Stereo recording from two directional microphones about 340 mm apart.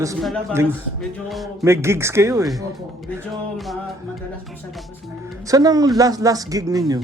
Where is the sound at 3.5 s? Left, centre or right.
Centre.